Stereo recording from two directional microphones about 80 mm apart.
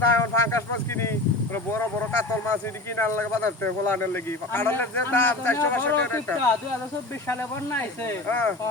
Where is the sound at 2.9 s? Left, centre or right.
Left.